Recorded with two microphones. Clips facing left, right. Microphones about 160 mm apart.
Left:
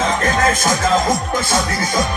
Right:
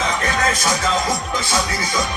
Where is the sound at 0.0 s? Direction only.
50° left (ahead or behind).